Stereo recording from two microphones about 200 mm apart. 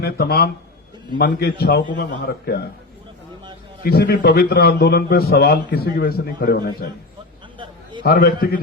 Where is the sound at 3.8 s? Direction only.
50° left (ahead or behind).